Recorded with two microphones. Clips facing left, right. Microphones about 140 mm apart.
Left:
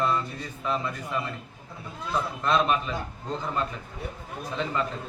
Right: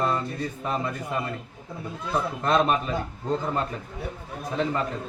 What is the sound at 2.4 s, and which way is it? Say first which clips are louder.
Speech: right 2 dB; 40° right (ahead or behind).